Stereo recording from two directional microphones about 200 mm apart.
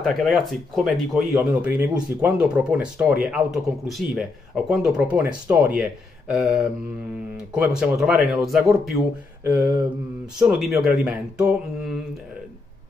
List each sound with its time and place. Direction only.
0.0 s speech: centre (ahead or behind)
9.4 s a sound: 10° right (ahead or behind)
10.4 s speech: centre (ahead or behind)